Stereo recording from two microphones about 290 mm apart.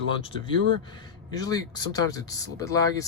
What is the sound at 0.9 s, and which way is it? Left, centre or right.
Speech, centre.